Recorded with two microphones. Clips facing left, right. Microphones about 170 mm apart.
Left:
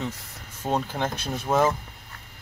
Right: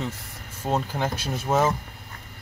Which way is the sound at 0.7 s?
5° right (ahead or behind).